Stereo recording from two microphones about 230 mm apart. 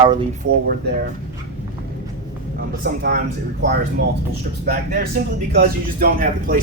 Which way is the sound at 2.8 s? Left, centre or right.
Right.